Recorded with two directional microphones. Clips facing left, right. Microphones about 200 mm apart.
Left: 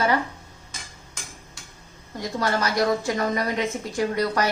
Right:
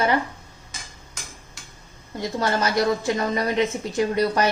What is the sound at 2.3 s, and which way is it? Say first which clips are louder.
A woman's voice: right 1 dB; 25° right (ahead or behind).